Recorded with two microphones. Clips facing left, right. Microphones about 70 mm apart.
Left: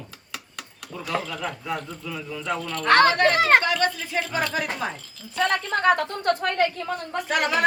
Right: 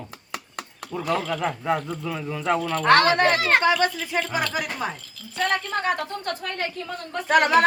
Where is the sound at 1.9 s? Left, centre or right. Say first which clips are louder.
Right 4 dB; right.